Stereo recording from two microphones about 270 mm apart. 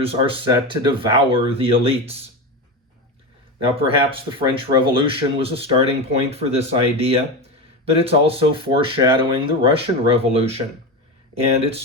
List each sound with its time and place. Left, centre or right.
0.0 s speech: centre
3.8 s speech: centre